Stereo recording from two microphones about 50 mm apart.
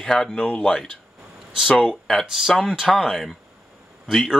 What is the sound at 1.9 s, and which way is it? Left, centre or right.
Speech, centre.